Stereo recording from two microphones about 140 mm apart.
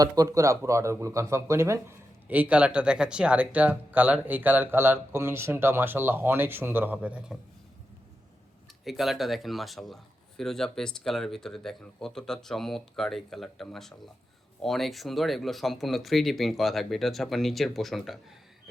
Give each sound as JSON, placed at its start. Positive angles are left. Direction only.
{"t": 0.0, "sound": "speech", "side_deg": -25}
{"t": 8.8, "sound": "a man's voice", "side_deg": 0}